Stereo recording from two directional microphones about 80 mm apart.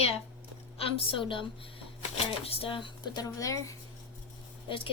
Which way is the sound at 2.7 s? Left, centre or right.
Left.